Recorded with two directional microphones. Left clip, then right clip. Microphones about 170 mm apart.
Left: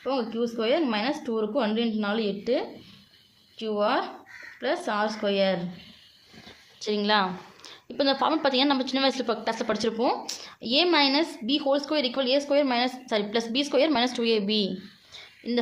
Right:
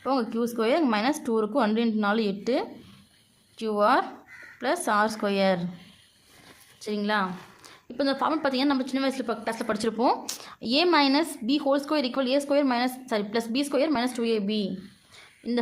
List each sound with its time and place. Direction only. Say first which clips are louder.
0.0 s a woman's voice: right 1 dB; 40° right (ahead or behind)
6.7 s a woman's voice: left 3 dB; 25° right (ahead or behind)
15.4 s a woman's voice: left 1 dB; 30° right (ahead or behind)